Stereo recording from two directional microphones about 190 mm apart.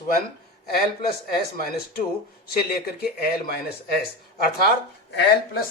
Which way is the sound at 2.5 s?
55° left (ahead or behind).